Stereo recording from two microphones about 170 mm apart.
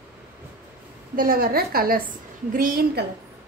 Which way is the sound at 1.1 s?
55° right (ahead or behind).